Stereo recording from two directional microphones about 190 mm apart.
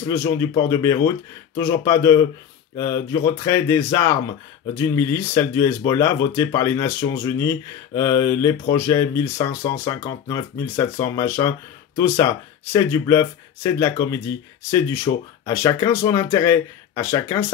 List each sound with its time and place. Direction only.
0.0 s speech: 15° left (ahead or behind)